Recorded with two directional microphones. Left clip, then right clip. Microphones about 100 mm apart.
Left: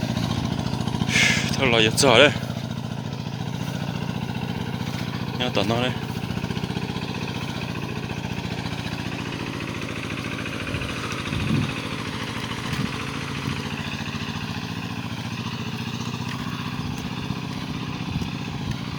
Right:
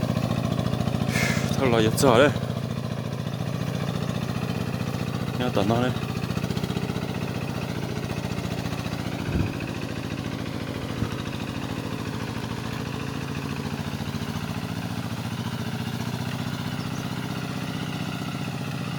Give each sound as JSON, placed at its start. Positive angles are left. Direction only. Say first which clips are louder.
{"t": 1.1, "sound": "speech", "louder": "left 8 dB", "side_deg": -25}
{"t": 5.4, "sound": "speech", "louder": "left 1 dB", "side_deg": -30}